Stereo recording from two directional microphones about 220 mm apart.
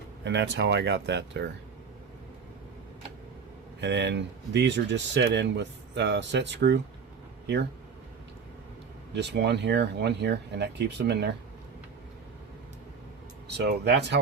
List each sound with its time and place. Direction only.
0.3 s speech: 50° right (ahead or behind)
3.8 s speech: 50° right (ahead or behind)
9.1 s speech: 50° right (ahead or behind)
13.7 s speech: 50° right (ahead or behind)